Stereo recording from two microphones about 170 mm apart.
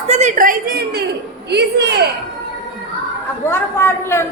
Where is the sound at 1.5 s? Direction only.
80° right.